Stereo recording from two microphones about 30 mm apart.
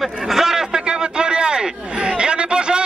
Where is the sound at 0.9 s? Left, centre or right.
Right.